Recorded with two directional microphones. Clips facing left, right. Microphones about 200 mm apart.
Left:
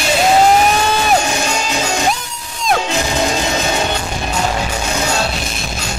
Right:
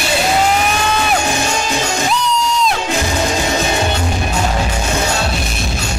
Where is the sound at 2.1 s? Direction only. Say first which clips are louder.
Right 9 dB; 50° left (ahead or behind).